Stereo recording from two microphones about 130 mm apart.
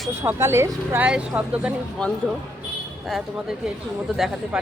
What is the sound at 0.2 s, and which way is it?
Speech, 20° right (ahead or behind).